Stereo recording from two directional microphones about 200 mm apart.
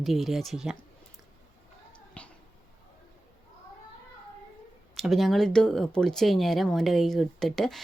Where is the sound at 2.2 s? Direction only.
5° left (ahead or behind).